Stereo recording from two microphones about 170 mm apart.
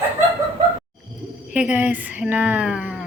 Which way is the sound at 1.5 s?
10° right (ahead or behind).